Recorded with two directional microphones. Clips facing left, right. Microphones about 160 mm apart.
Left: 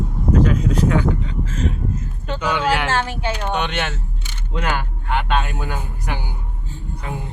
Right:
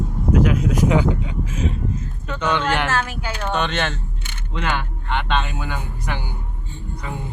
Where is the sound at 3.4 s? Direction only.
15° left (ahead or behind).